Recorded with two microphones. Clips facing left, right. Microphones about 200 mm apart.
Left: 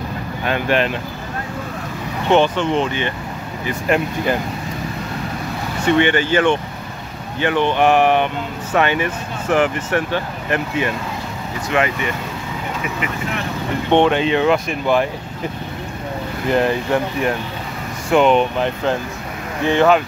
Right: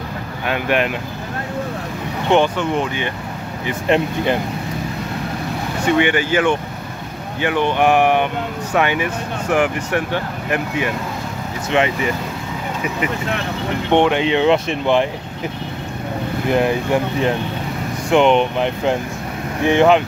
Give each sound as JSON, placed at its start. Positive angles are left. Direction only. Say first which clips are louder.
{"t": 0.5, "sound": "speech", "louder": "even", "side_deg": -10}
{"t": 2.3, "sound": "speech", "louder": "left 1 dB", "side_deg": -10}
{"t": 3.6, "sound": "speech", "louder": "right 1 dB", "side_deg": -25}
{"t": 5.9, "sound": "speech", "louder": "left 1 dB", "side_deg": -10}
{"t": 11.7, "sound": "speech", "louder": "right 2 dB", "side_deg": -25}
{"t": 13.9, "sound": "speech", "louder": "even", "side_deg": -15}
{"t": 16.4, "sound": "speech", "louder": "even", "side_deg": -10}
{"t": 18.1, "sound": "speech", "louder": "even", "side_deg": -20}